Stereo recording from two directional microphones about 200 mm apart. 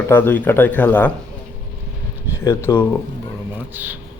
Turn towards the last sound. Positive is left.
turn(degrees=-10)  # may be behind; listen again after turning